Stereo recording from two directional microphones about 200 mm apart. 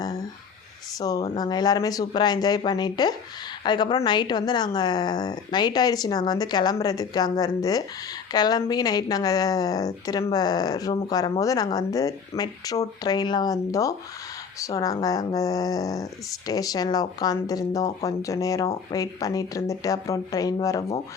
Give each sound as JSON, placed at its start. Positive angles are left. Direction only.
{"t": 0.9, "sound": "speech", "side_deg": 20}